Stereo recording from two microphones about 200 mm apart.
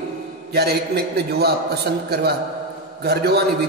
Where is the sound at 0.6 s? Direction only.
55° right (ahead or behind).